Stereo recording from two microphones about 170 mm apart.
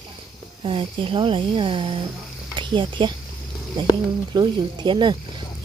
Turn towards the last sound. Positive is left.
turn(degrees=-25)  # may be behind; listen again after turning